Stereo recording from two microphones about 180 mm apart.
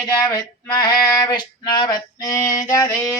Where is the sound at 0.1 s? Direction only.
20° left (ahead or behind).